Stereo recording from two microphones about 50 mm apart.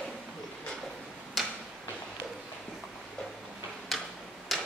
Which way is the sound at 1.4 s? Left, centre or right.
Centre.